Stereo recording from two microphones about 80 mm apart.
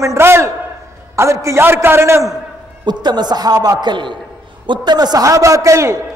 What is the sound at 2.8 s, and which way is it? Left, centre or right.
A man's voice, right.